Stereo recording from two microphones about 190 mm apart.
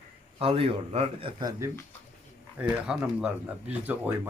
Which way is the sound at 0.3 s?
30° right (ahead or behind).